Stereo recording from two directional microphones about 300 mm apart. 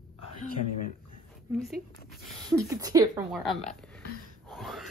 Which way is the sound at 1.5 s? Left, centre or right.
Centre.